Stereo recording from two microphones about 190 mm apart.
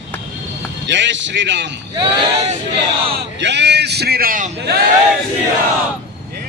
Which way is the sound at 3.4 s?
65° right (ahead or behind).